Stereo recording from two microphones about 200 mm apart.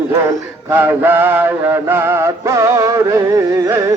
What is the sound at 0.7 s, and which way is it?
Mantra, 10° right (ahead or behind).